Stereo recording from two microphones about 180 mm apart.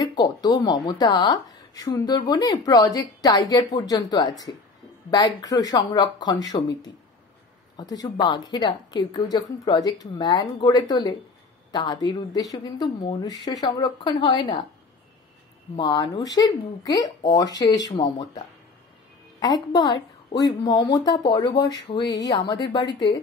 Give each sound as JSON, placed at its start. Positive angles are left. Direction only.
{"t": 0.0, "sound": "a woman's voice", "side_deg": 25}
{"t": 7.9, "sound": "a woman's voice", "side_deg": 20}
{"t": 15.7, "sound": "a woman's voice", "side_deg": 25}
{"t": 19.4, "sound": "a woman's voice", "side_deg": 25}